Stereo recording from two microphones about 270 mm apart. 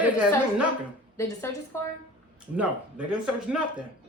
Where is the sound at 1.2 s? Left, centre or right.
Centre.